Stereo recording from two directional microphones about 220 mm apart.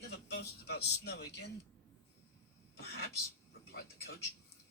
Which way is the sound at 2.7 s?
45° left (ahead or behind).